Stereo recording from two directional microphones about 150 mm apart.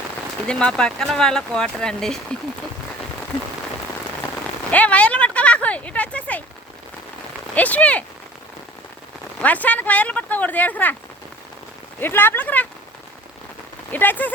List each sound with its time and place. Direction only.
0.4 s speech: 5° left (ahead or behind)
4.7 s a sound: 10° left (ahead or behind)
7.5 s speech: 10° left (ahead or behind)
9.4 s speech: 10° left (ahead or behind)
11.9 s speech: 15° left (ahead or behind)
13.9 s speech: 10° left (ahead or behind)